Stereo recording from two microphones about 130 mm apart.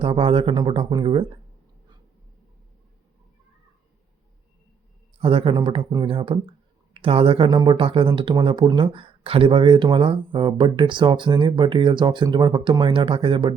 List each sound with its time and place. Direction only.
0.0 s speech: 45° right (ahead or behind)
5.2 s speech: 45° right (ahead or behind)